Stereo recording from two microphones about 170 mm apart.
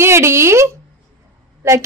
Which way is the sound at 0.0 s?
15° right (ahead or behind).